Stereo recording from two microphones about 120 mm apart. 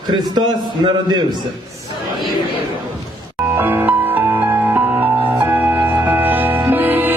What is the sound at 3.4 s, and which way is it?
Music, 20° right (ahead or behind).